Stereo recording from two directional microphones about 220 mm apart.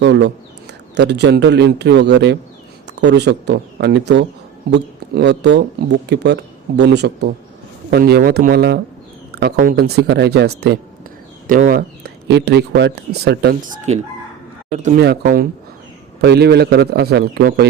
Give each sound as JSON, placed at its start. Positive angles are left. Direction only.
{"t": 0.0, "sound": "speech", "side_deg": -55}
{"t": 14.8, "sound": "speech", "side_deg": -45}